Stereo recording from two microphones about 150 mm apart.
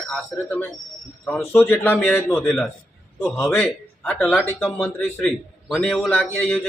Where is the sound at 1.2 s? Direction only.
10° left (ahead or behind).